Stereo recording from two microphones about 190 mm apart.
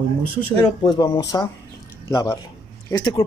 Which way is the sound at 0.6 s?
20° left (ahead or behind).